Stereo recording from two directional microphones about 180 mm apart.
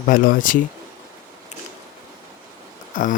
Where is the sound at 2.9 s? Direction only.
45° left (ahead or behind).